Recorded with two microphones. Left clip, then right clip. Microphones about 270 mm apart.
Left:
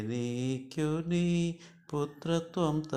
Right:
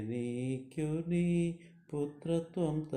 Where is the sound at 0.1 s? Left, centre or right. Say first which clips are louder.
Left 3 dB; centre.